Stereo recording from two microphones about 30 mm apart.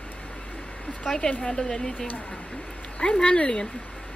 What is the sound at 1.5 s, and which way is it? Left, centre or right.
Speech, left.